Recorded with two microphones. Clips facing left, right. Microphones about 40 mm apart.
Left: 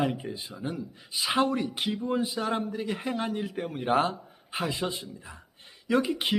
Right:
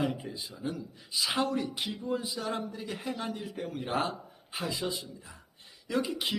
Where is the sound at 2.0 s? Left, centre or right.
Left.